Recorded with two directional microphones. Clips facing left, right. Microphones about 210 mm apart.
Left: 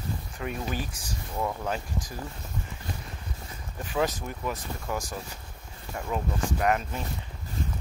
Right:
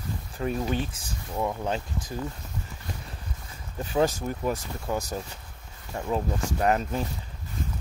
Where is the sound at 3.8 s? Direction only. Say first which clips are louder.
Right 4 dB; 30° right (ahead or behind).